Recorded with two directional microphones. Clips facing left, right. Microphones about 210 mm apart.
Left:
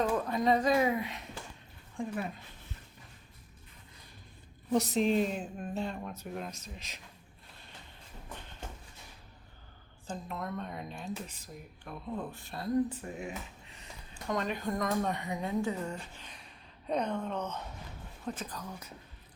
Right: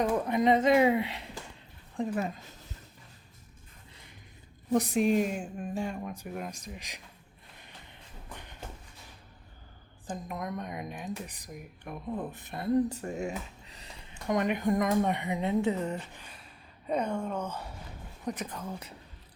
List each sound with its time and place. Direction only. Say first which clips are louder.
0.0 s speech: right 3 dB; 20° right (ahead or behind)
2.0 s speech: right 5 dB; 45° right (ahead or behind)
4.7 s a woman's voice: right 2 dB; 10° right (ahead or behind)
10.1 s a woman's voice: right 2 dB; 15° right (ahead or behind)
12.7 s speech: right 3 dB; 40° right (ahead or behind)
14.1 s speech: right 5 dB; 20° right (ahead or behind)
16.2 s a sound: right 1 dB; 5° right (ahead or behind)
18.3 s speech: right 4 dB; 20° right (ahead or behind)